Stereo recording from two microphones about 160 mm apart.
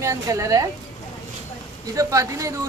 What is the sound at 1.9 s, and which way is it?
Speech, 20° right (ahead or behind).